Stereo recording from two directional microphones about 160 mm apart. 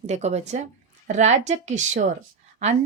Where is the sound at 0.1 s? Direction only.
45° right (ahead or behind).